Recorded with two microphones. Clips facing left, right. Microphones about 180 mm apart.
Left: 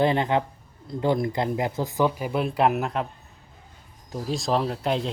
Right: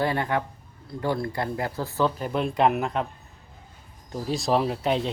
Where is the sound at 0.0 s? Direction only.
20° left (ahead or behind); by 3.1 s centre (ahead or behind).